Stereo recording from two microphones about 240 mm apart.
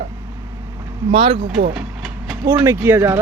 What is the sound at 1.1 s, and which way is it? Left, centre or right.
Speech, right.